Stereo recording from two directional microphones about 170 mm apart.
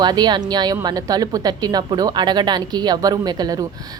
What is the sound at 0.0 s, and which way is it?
A woman's voice, 25° right (ahead or behind).